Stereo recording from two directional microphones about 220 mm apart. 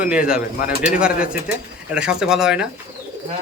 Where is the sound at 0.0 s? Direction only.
5° right (ahead or behind).